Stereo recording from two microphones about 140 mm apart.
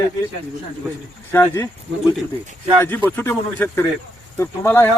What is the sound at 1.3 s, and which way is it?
Speech, 15° left (ahead or behind).